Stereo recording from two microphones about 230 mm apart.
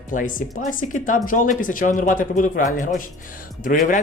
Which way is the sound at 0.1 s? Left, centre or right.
Left.